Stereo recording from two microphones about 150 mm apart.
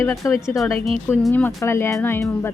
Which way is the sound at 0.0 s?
20° left (ahead or behind).